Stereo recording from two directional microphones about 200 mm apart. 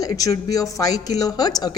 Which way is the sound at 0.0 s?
15° left (ahead or behind).